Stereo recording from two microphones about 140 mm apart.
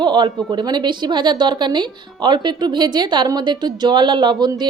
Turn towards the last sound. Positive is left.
turn(degrees=-30)  # may be behind; listen again after turning